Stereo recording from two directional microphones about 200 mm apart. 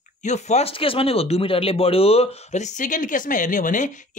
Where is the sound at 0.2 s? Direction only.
35° left (ahead or behind).